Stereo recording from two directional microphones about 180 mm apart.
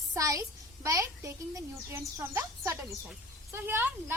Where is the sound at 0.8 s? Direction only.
15° right (ahead or behind).